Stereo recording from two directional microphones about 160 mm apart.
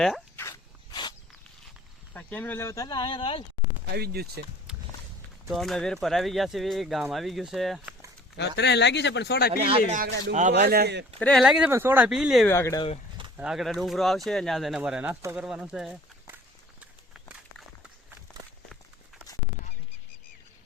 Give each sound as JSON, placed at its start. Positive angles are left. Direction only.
{"t": 0.3, "sound": "a sound", "side_deg": 20}
{"t": 2.1, "sound": "speech", "side_deg": 10}
{"t": 3.8, "sound": "speech", "side_deg": -85}
{"t": 5.5, "sound": "speech", "side_deg": 0}
{"t": 8.4, "sound": "speech", "side_deg": 90}
{"t": 9.6, "sound": "speech", "side_deg": -35}
{"t": 9.9, "sound": "speech", "side_deg": -75}
{"t": 11.2, "sound": "speech", "side_deg": 5}
{"t": 12.5, "sound": "speech", "side_deg": 15}
{"t": 13.3, "sound": "speech", "side_deg": -5}
{"t": 15.2, "sound": "speech", "side_deg": -15}
{"t": 15.4, "sound": "speech", "side_deg": -5}
{"t": 16.8, "sound": "walk", "side_deg": -5}